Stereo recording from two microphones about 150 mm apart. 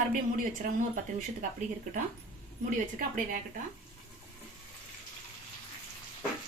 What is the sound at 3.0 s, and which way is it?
Speech, 65° right (ahead or behind).